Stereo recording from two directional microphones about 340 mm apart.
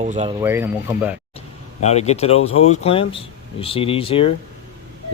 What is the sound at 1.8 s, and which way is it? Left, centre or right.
Speech, centre.